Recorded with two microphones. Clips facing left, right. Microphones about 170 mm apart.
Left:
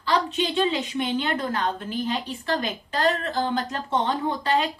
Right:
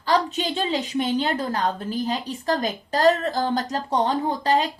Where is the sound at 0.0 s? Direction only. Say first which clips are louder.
Right 2 dB; 40° right (ahead or behind).